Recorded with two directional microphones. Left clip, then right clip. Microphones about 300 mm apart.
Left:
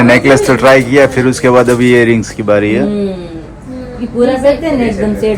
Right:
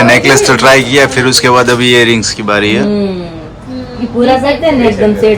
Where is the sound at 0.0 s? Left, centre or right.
Centre.